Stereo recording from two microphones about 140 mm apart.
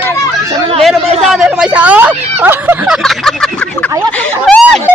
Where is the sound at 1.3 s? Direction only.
5° right (ahead or behind).